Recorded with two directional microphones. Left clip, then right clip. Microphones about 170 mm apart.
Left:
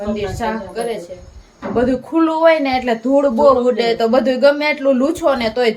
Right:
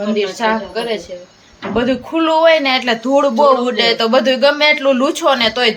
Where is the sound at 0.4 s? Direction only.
35° right (ahead or behind).